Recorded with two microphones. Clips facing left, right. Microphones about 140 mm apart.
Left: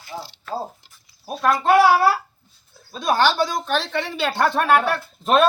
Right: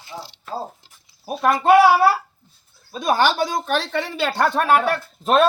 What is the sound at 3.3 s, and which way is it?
Speech, 10° right (ahead or behind).